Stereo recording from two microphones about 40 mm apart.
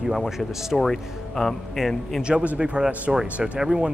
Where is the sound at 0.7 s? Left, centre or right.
Centre.